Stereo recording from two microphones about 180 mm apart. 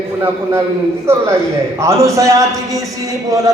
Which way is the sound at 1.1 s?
15° right (ahead or behind).